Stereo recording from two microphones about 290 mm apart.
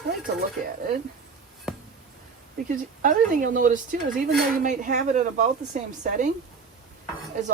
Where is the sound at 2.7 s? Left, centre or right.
Right.